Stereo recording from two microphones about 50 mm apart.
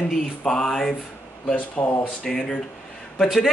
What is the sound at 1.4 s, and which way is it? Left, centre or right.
Speech, left.